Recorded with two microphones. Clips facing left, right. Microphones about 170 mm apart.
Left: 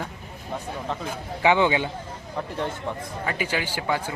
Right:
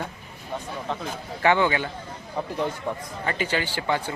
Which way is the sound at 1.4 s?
15° left (ahead or behind).